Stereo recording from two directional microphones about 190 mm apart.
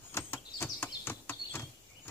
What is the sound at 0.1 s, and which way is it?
Bird, 10° left (ahead or behind).